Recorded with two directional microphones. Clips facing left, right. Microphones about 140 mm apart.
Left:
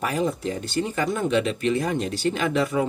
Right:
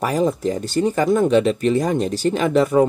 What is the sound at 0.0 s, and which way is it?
Speech, 35° right (ahead or behind).